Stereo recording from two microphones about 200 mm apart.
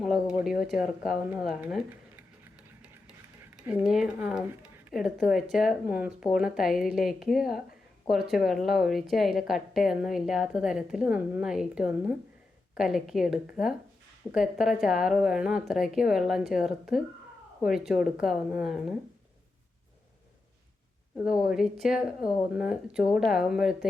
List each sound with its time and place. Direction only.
0.0 s a woman's voice: 5° right (ahead or behind)
3.6 s a woman's voice: 5° right (ahead or behind)
21.2 s a woman's voice: 5° right (ahead or behind)